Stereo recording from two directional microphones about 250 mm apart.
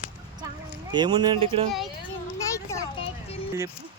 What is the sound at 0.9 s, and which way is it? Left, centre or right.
Speech, centre.